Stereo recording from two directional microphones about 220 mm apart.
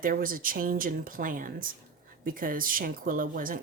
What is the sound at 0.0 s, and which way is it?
Speech, 40° right (ahead or behind).